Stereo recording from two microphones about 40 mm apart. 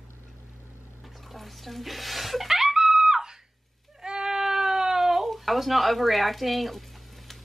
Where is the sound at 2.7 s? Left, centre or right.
Centre.